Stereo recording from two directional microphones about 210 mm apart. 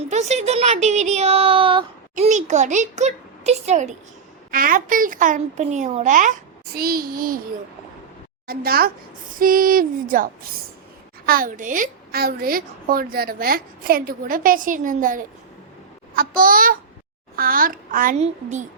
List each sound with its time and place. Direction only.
0.1 s speech: 30° right (ahead or behind)
8.4 s a woman's voice: 45° right (ahead or behind)
11.3 s a woman's voice: 40° right (ahead or behind)